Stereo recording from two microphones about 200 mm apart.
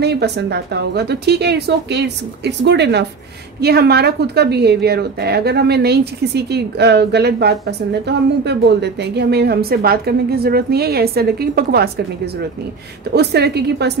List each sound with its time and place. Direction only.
0.0 s a woman's voice: 55° right (ahead or behind)
13.1 s a woman's voice: 55° right (ahead or behind)